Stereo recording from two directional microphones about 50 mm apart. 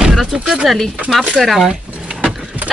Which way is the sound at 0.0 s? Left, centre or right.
Centre.